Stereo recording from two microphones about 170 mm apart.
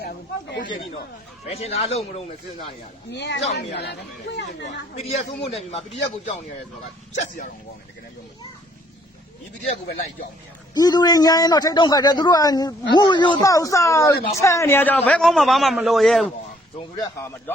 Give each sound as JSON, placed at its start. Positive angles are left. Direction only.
{"t": 1.5, "sound": "speech", "side_deg": 35}
{"t": 3.1, "sound": "a woman's voice", "side_deg": 90}
{"t": 3.5, "sound": "speech", "side_deg": 75}
{"t": 5.0, "sound": "speech", "side_deg": 40}
{"t": 9.8, "sound": "a man's voice", "side_deg": 65}
{"t": 10.8, "sound": "a man's voice", "side_deg": 25}
{"t": 17.0, "sound": "speech", "side_deg": 15}